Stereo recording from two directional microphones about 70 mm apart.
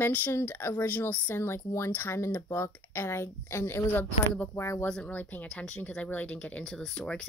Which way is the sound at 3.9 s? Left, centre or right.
Left.